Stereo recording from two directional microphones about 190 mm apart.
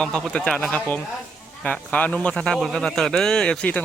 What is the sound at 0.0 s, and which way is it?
A man's voice, 5° left (ahead or behind).